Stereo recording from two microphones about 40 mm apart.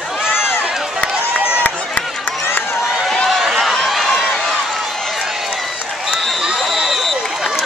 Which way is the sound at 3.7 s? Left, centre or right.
Centre.